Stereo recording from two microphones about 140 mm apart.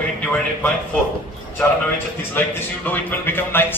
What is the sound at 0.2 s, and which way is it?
Music, 10° left (ahead or behind).